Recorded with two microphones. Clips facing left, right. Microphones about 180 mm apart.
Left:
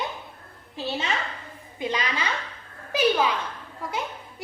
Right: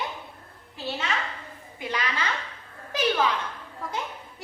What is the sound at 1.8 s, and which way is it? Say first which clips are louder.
Speech: left 3 dB; 20° left (ahead or behind).